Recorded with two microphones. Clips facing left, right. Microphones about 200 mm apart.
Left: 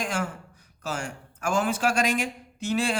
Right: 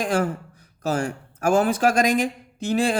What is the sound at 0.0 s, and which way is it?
Speech, 35° right (ahead or behind).